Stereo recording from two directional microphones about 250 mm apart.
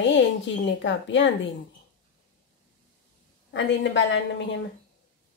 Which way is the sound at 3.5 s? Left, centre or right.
Left.